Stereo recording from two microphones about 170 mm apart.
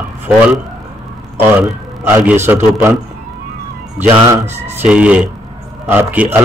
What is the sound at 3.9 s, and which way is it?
A man's voice, 10° right (ahead or behind).